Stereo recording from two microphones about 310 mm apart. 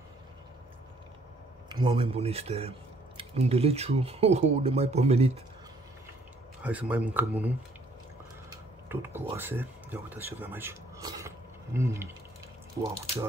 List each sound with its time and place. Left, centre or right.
1.7 s speech: centre
6.6 s speech: centre